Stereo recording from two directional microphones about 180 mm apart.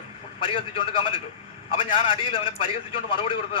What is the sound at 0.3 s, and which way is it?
A man's voice, 30° left (ahead or behind).